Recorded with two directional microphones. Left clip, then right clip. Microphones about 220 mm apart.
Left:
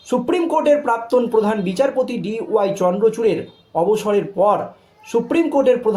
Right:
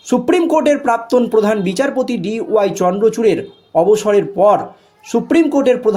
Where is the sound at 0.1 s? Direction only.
35° right (ahead or behind).